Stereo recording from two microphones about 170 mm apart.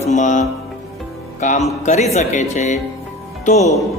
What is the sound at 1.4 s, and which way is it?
Music, 45° left (ahead or behind).